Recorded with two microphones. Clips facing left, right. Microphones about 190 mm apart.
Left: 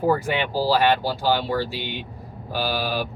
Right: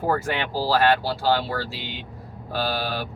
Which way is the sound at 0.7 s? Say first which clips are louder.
Even; 15° left (ahead or behind).